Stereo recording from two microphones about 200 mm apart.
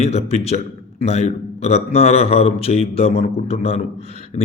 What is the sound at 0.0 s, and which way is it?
A man's voice, 30° left (ahead or behind).